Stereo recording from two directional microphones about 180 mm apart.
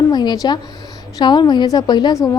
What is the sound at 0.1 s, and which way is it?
A woman's voice, 25° left (ahead or behind).